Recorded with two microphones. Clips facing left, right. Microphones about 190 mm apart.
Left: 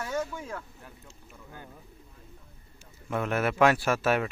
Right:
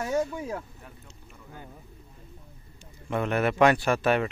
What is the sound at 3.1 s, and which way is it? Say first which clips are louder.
Speech: right 2 dB; centre (ahead or behind).